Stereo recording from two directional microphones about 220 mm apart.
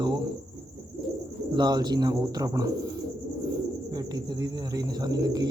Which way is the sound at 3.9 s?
15° right (ahead or behind).